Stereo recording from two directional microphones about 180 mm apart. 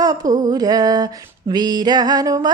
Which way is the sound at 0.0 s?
20° right (ahead or behind).